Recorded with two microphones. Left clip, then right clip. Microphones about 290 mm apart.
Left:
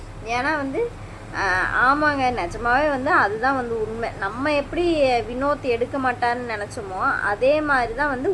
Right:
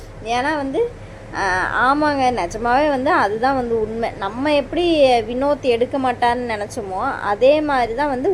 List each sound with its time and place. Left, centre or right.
0.3 s a woman's voice: centre